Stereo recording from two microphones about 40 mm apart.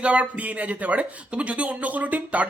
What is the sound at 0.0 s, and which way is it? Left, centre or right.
Speech, right.